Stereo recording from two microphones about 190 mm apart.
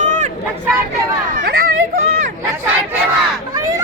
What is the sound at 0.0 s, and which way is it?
Vehicle, 40° right (ahead or behind).